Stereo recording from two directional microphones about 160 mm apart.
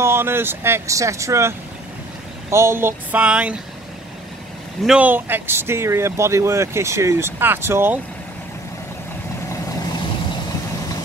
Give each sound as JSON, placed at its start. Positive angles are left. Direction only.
{"t": 0.0, "sound": "speech", "side_deg": -15}
{"t": 2.5, "sound": "speech", "side_deg": -15}
{"t": 4.8, "sound": "speech", "side_deg": -10}